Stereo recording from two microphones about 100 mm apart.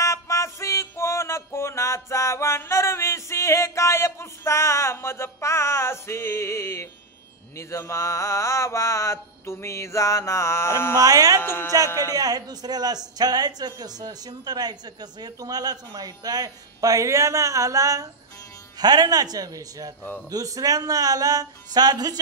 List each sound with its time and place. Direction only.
0.0 s music: 30° left (ahead or behind)
7.5 s mantra: 30° left (ahead or behind)
11.0 s speech: 35° right (ahead or behind)
11.4 s mantra: 25° left (ahead or behind)
12.1 s speech: 40° right (ahead or behind)